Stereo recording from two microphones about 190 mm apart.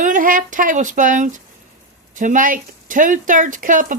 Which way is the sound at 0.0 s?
45° right (ahead or behind).